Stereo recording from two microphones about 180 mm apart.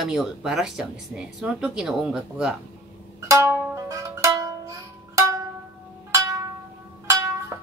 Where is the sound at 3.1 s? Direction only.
15° right (ahead or behind).